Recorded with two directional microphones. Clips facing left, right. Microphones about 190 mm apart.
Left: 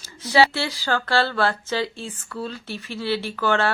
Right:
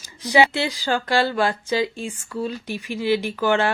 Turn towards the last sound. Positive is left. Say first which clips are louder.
# right 2 dB
turn(degrees=-15)  # may be behind; listen again after turning